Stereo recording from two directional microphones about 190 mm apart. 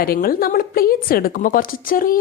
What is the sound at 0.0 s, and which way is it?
A woman's voice, 50° left (ahead or behind).